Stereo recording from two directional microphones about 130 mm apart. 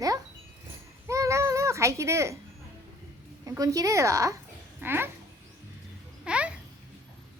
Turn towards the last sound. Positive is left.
turn(degrees=-10)  # may be behind; listen again after turning